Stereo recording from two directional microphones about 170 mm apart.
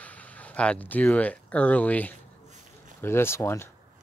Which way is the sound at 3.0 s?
15° left (ahead or behind).